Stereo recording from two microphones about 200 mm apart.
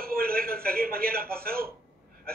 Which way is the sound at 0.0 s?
50° right (ahead or behind).